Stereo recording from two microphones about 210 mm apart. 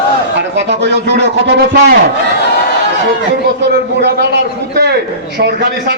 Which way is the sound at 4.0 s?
55° right (ahead or behind).